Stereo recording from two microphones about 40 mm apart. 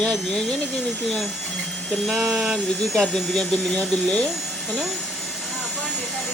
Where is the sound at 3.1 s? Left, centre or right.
Centre.